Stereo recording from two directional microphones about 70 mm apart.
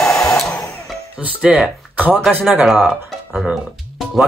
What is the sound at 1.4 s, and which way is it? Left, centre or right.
Speech, centre.